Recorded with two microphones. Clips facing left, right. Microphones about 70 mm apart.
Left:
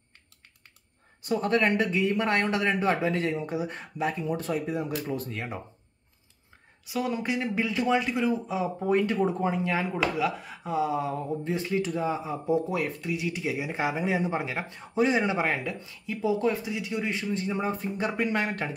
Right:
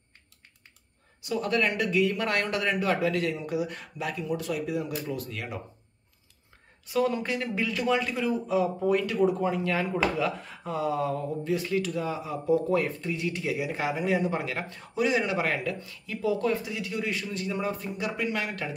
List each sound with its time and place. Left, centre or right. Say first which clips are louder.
1.2 s speech: left 2 dB; left
6.9 s speech: right 2 dB; centre
12.6 s speech: right 3 dB; centre; by 18.8 s left